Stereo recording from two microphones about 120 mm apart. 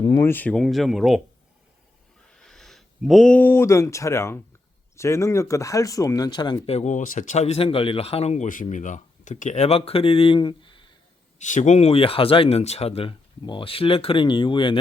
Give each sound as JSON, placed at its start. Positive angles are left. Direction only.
{"t": 0.3, "sound": "speech", "side_deg": 15}
{"t": 0.6, "sound": "speech", "side_deg": 0}
{"t": 2.3, "sound": "speech", "side_deg": 5}
{"t": 6.7, "sound": "speech", "side_deg": 70}
{"t": 11.3, "sound": "speech", "side_deg": 90}
{"t": 13.4, "sound": "speech", "side_deg": 45}